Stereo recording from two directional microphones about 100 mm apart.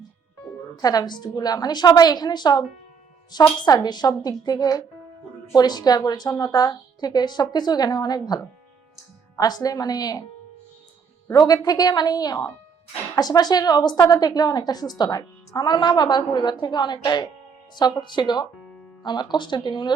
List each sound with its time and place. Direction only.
0.8 s a woman's voice: 40° left (ahead or behind)
9.4 s a woman's voice: 40° left (ahead or behind)
11.3 s a woman's voice: 40° left (ahead or behind)